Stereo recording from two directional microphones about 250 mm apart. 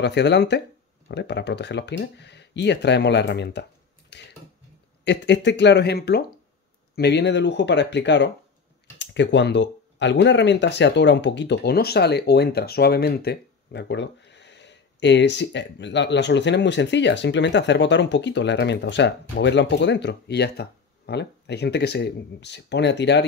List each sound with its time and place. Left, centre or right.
0.0 s speech: left